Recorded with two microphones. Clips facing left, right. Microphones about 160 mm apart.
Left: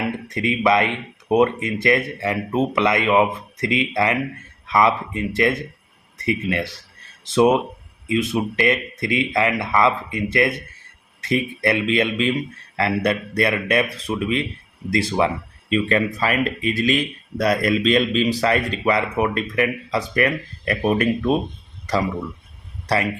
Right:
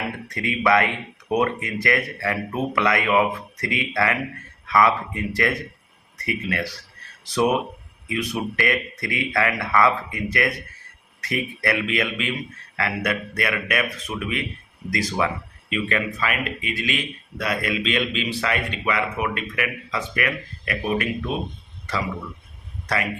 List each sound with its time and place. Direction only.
0.3 s speech: 20° left (ahead or behind); by 20.9 s 40° left (ahead or behind)